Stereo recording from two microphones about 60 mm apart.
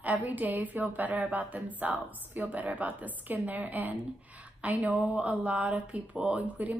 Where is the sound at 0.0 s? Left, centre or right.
Right.